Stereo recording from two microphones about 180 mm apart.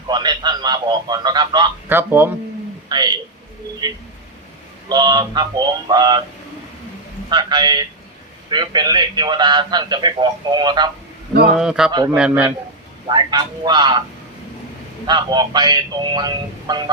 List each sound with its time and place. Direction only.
0.1 s a man's voice: 25° right (ahead or behind)
1.9 s speech: 10° right (ahead or behind)
2.9 s telephone: 25° right (ahead or behind)
4.9 s a man's voice: 25° right (ahead or behind)
7.3 s a man's voice: 25° right (ahead or behind)
11.5 s a man's voice: 5° right (ahead or behind)
11.9 s a man's voice: 25° right (ahead or behind)
12.1 s speech: 5° right (ahead or behind)
13.1 s a man's voice: 25° right (ahead or behind)
15.0 s a man's voice: 25° right (ahead or behind)